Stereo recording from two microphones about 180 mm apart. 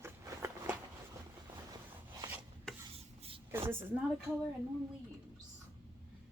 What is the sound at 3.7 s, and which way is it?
Speech, 10° right (ahead or behind).